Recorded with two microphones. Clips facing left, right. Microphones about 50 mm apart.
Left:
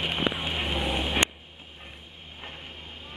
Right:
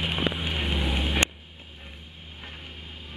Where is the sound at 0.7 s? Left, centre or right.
Centre.